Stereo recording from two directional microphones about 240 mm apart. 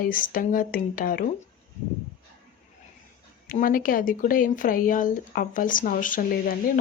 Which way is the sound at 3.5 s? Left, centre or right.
Left.